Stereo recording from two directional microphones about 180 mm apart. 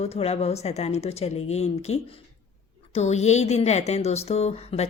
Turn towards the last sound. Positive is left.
turn(degrees=35)  # may be behind; listen again after turning